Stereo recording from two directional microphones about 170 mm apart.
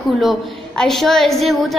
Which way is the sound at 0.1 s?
Centre (ahead or behind).